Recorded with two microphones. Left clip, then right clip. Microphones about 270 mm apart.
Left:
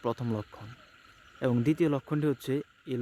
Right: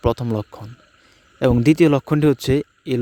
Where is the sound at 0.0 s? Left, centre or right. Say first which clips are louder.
Right 12 dB; right.